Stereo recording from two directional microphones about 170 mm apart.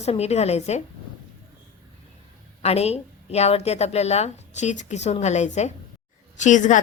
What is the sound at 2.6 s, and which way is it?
A woman's voice, 40° left (ahead or behind).